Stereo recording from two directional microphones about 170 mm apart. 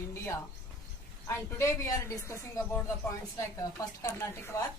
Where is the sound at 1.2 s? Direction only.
15° left (ahead or behind).